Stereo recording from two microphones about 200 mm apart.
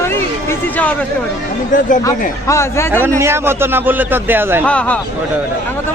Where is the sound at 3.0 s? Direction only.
15° right (ahead or behind).